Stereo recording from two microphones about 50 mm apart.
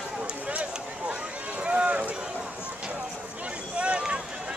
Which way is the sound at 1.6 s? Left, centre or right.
Right.